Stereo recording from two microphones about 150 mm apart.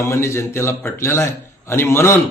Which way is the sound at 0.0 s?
20° left (ahead or behind).